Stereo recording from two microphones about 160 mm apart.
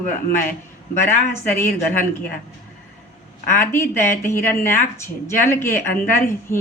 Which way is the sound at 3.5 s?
15° left (ahead or behind).